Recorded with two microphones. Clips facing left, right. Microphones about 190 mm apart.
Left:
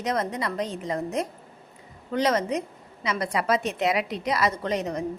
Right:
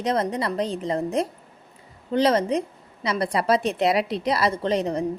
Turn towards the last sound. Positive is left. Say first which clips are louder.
# right 4 dB
turn(degrees=-30)  # may be behind; listen again after turning